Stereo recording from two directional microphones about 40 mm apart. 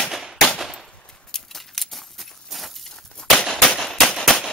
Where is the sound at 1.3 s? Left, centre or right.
Centre.